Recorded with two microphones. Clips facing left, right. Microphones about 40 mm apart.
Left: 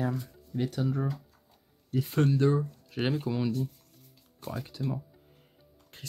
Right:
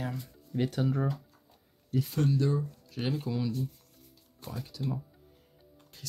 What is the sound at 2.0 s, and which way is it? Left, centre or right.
Speech, left.